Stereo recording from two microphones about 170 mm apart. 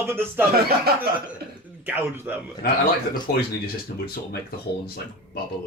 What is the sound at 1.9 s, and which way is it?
Speech, 10° right (ahead or behind).